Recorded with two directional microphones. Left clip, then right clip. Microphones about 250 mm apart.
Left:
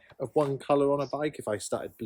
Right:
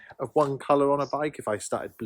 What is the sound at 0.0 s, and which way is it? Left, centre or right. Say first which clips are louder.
Speech: right 3 dB; centre.